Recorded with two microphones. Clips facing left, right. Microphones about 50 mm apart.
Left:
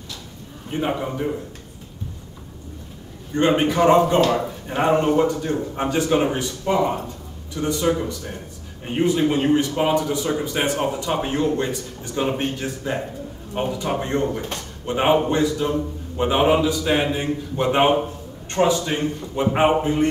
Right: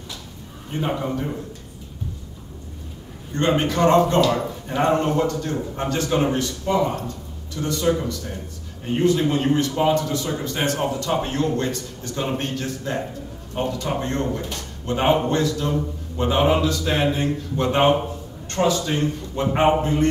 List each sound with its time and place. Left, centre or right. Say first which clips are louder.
0.7 s a man's voice: left 1 dB; centre
3.3 s a man's voice: left 2 dB; centre